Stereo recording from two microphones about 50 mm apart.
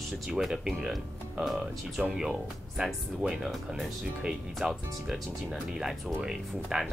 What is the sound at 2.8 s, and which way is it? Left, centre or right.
Speech, centre.